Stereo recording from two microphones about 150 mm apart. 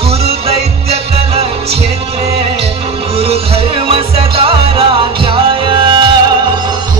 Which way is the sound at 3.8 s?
40° right (ahead or behind).